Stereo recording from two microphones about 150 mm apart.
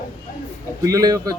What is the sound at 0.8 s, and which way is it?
Speech, 25° right (ahead or behind).